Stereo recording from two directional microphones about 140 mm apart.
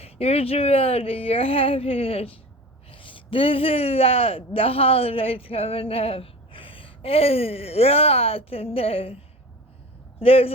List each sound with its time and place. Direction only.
0.0 s a man's voice: 45° left (ahead or behind)
10.2 s a man's voice: 45° left (ahead or behind)